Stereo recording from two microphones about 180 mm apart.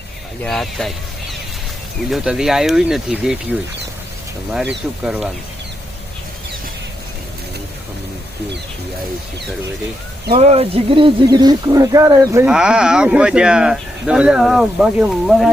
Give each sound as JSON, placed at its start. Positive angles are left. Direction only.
{"t": 0.4, "sound": "speech", "side_deg": 0}
{"t": 5.0, "sound": "speech", "side_deg": -5}
{"t": 10.3, "sound": "speech", "side_deg": -35}
{"t": 12.5, "sound": "speech", "side_deg": -5}